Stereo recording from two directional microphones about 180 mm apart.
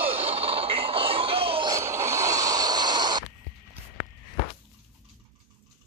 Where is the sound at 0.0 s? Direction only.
30° right (ahead or behind).